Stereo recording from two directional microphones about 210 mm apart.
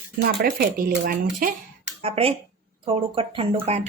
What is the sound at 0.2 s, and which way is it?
Speech, 45° right (ahead or behind).